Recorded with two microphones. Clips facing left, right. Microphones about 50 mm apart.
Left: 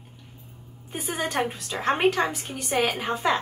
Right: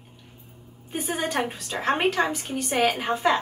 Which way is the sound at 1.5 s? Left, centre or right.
Right.